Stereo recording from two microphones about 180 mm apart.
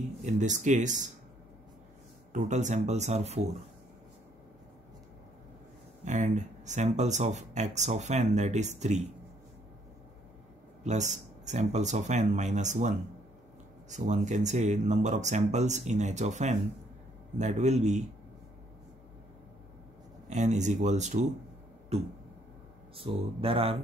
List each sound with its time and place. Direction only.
0.2 s speech: 40° right (ahead or behind)
2.3 s speech: 40° right (ahead or behind)
6.0 s speech: 40° right (ahead or behind)
10.8 s speech: 40° right (ahead or behind)
13.8 s speech: 40° right (ahead or behind)
20.2 s speech: 40° right (ahead or behind)